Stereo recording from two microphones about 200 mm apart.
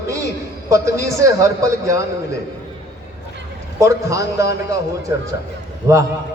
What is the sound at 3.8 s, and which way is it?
Speech, 15° right (ahead or behind).